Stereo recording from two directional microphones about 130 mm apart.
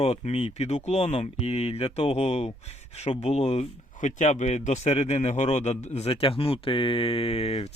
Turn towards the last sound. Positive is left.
turn(degrees=50)  # may be behind; listen again after turning